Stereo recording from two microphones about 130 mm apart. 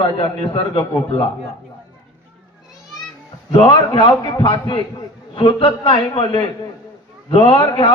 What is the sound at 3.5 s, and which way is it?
A man's voice, 45° left (ahead or behind).